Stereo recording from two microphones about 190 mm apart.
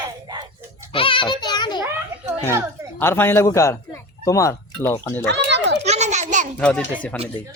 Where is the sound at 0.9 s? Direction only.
30° left (ahead or behind).